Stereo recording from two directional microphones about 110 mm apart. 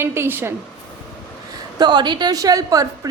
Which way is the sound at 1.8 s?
45° right (ahead or behind).